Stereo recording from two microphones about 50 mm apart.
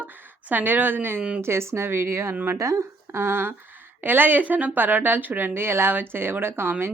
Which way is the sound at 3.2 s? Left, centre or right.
Right.